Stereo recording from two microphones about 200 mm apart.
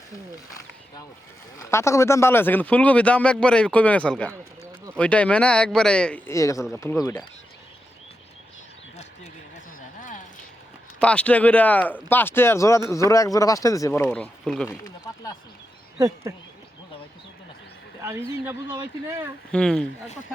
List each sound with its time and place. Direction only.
1.5 s speech: 15° left (ahead or behind)
10.0 s a sound: 40° left (ahead or behind)
11.0 s speech: 5° left (ahead or behind)
15.0 s speech: 15° left (ahead or behind)
16.0 s speech: 15° right (ahead or behind)
18.0 s speech: 10° right (ahead or behind)
19.5 s speech: 5° left (ahead or behind)